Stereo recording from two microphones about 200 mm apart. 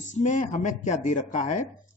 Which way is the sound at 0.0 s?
35° left (ahead or behind).